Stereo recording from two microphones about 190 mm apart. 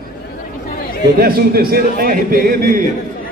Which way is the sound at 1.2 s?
50° right (ahead or behind).